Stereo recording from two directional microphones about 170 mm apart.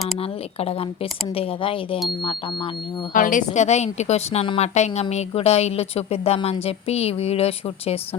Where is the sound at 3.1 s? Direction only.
50° left (ahead or behind).